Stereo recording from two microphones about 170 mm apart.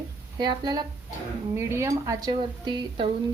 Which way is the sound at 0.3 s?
25° right (ahead or behind).